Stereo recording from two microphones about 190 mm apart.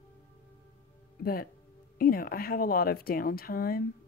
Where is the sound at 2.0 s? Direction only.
50° left (ahead or behind).